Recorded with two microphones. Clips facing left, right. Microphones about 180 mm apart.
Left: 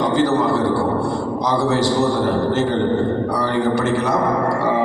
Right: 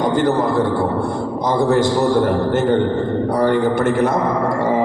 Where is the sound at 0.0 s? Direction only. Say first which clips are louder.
Right 1 dB; 50° right (ahead or behind).